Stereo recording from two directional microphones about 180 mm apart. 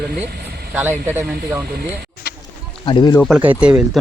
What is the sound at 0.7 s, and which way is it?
Speech, 10° right (ahead or behind).